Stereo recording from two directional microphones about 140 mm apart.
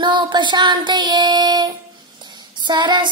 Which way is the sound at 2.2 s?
35° right (ahead or behind).